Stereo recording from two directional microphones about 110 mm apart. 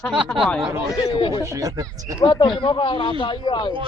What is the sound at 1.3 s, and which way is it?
Speech, 30° right (ahead or behind).